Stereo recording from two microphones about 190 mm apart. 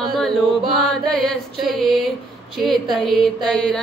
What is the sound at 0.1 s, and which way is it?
Mantra, centre (ahead or behind).